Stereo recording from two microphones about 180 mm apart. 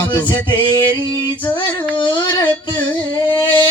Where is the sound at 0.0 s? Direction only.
20° left (ahead or behind).